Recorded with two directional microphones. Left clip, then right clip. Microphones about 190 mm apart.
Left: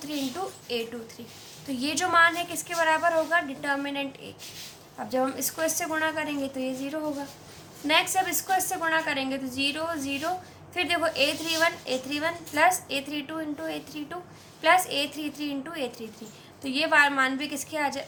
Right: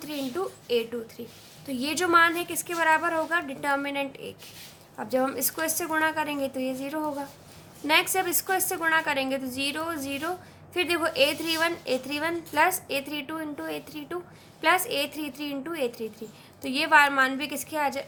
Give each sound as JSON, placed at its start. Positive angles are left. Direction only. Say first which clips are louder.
{"t": 0.7, "sound": "a woman's voice", "louder": "right 8 dB", "side_deg": -40}